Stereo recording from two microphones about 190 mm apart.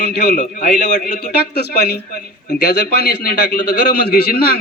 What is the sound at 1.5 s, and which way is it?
A man's voice, 60° left (ahead or behind).